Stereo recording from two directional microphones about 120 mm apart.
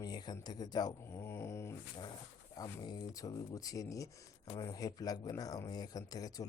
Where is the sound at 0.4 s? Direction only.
35° left (ahead or behind).